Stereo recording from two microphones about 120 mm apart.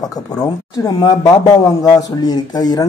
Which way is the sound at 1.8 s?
30° left (ahead or behind).